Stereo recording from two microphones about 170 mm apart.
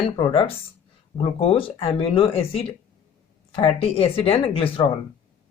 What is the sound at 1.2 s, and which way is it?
Speech, 35° left (ahead or behind).